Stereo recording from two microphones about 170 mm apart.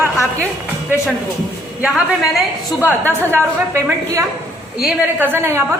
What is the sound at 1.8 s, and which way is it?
A woman's voice, 5° right (ahead or behind).